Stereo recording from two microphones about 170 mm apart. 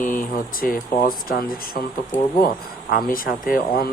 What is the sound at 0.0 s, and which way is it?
Speech, 50° left (ahead or behind).